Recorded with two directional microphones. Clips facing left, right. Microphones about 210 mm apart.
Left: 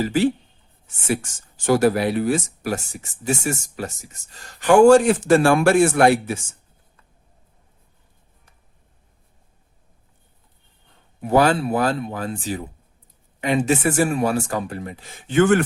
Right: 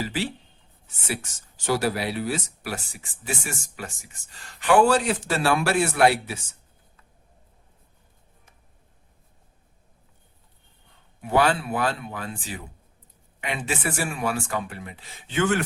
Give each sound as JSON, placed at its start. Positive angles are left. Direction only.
{"t": 0.0, "sound": "speech", "side_deg": 45}
{"t": 11.2, "sound": "speech", "side_deg": 40}